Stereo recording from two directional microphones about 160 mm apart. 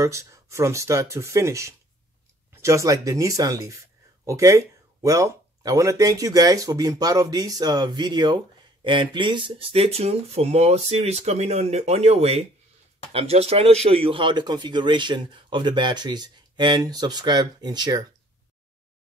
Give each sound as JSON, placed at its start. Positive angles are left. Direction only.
{"t": 0.0, "sound": "speech", "side_deg": -20}